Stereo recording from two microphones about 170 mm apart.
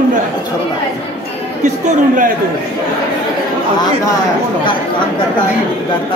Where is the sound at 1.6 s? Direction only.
45° right (ahead or behind).